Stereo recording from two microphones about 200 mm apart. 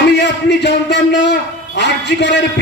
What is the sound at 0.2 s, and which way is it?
A man's voice, 60° left (ahead or behind).